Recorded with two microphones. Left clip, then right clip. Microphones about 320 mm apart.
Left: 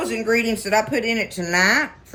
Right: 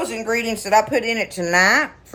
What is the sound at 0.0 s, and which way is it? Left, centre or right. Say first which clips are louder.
Speech: left 2 dB; centre.